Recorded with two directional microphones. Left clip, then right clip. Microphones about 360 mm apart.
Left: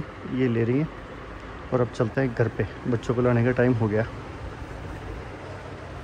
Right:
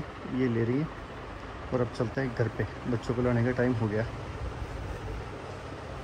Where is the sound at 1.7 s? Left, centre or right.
Centre.